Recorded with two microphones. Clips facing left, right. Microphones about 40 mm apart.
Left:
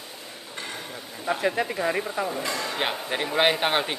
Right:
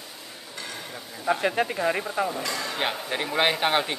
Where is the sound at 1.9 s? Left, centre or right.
Right.